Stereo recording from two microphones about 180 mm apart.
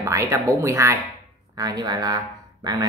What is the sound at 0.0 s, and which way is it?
Speech, 15° right (ahead or behind).